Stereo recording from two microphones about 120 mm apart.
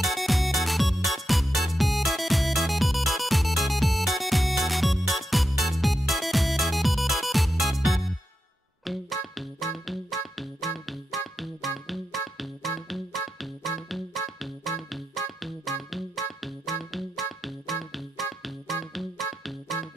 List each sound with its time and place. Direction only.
0.0 s music: centre (ahead or behind)
19.7 s music: 20° left (ahead or behind)